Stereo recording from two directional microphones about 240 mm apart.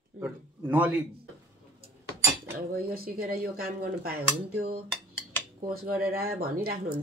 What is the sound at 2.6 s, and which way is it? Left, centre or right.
Dishes, right.